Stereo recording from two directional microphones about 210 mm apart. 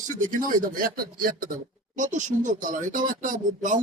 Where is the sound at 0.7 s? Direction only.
45° right (ahead or behind).